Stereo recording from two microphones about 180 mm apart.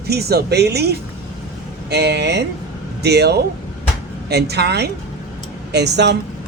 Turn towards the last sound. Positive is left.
turn(degrees=-70)  # may be behind; listen again after turning